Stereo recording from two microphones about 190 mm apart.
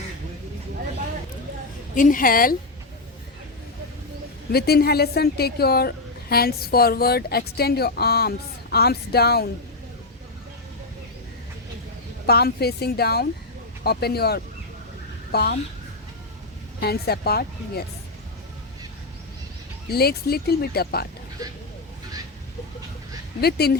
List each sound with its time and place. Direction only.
2.0 s a woman's voice: 45° left (ahead or behind)
4.5 s a woman's voice: 55° left (ahead or behind)
12.2 s a woman's voice: 55° left (ahead or behind)
16.8 s a woman's voice: 55° left (ahead or behind)
19.9 s a woman's voice: 55° left (ahead or behind)
23.4 s a woman's voice: 55° left (ahead or behind)